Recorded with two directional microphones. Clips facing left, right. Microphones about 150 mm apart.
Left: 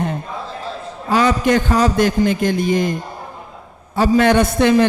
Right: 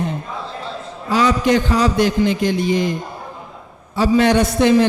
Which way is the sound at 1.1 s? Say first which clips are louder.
Even; 50° left (ahead or behind).